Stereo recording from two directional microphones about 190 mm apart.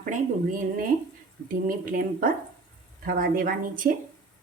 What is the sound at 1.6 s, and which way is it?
A woman's voice, 45° right (ahead or behind).